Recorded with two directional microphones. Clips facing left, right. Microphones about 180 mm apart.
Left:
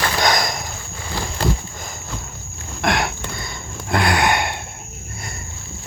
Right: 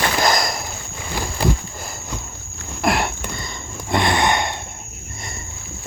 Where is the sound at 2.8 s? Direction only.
5° right (ahead or behind).